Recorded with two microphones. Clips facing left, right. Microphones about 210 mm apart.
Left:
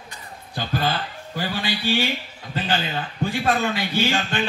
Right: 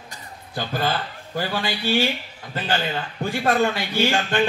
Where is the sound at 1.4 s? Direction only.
50° right (ahead or behind).